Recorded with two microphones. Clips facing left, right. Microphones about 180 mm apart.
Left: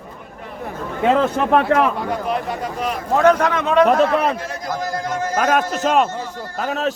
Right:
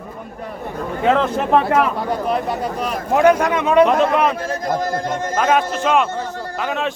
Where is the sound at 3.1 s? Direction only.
10° right (ahead or behind).